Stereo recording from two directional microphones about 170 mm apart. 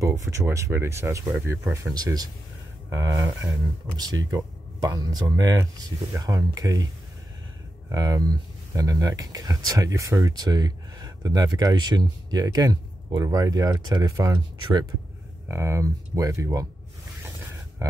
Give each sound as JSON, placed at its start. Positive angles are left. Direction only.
{"t": 0.0, "sound": "speech", "side_deg": -20}
{"t": 7.9, "sound": "speech", "side_deg": -20}